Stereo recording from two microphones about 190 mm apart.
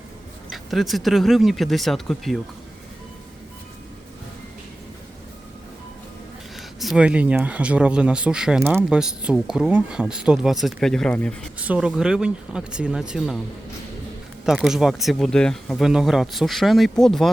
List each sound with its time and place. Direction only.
0.5 s speech: centre (ahead or behind)
6.6 s speech: centre (ahead or behind)
11.6 s speech: 5° right (ahead or behind)
14.4 s speech: 5° right (ahead or behind)